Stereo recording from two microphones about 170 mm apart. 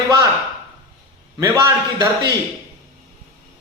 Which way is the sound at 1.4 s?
20° right (ahead or behind).